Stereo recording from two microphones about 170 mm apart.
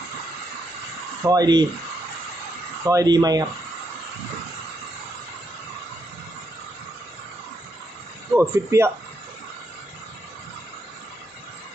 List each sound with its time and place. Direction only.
1.2 s speech: 20° right (ahead or behind)
2.8 s speech: 20° right (ahead or behind)
8.4 s speech: 15° right (ahead or behind)